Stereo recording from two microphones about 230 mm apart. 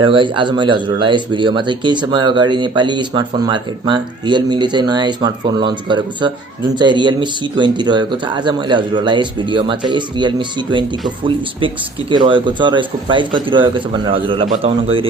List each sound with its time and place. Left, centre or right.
0.0 s speech: right
12.1 s speech: right